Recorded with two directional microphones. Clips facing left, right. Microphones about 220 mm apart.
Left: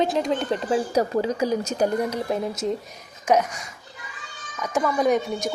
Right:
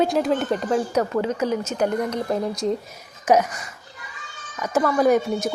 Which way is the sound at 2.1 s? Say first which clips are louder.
Right 2 dB; 5° left (ahead or behind).